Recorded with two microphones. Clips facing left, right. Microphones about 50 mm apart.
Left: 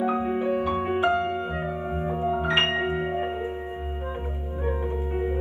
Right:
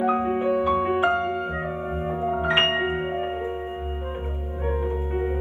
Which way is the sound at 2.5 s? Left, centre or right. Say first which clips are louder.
Right 3 dB; right.